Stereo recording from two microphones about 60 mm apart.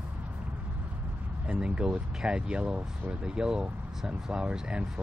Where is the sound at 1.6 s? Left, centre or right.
Centre.